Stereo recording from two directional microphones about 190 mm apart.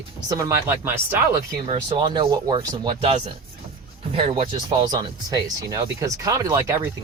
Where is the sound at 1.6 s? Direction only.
30° right (ahead or behind).